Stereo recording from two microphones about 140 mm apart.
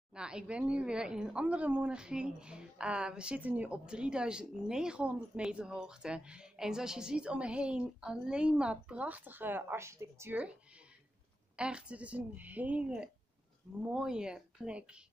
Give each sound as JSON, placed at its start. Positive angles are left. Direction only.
{"t": 0.1, "sound": "a woman's voice", "side_deg": -5}
{"t": 11.5, "sound": "a woman's voice", "side_deg": -5}